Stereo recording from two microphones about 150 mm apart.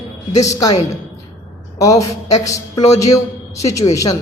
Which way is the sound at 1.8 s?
20° left (ahead or behind).